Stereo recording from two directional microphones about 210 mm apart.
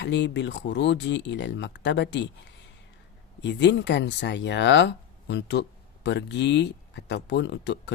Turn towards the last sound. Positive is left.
turn(degrees=55)  # may be behind; listen again after turning